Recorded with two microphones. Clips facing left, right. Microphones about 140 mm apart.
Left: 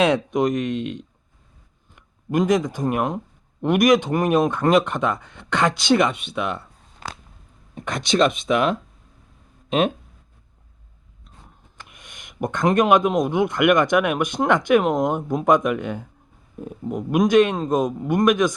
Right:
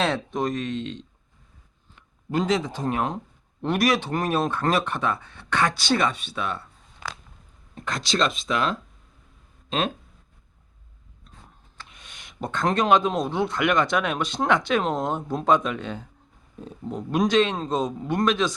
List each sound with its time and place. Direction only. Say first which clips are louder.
0.0 s speech: left 6 dB; 15° left (ahead or behind)
7.8 s speech: left 6 dB; 15° left (ahead or behind)
11.8 s speech: left 1 dB; 15° left (ahead or behind)